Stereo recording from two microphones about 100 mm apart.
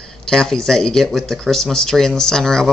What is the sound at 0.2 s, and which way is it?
Speech, 5° left (ahead or behind).